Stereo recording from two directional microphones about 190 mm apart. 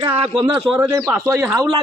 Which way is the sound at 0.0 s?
25° right (ahead or behind).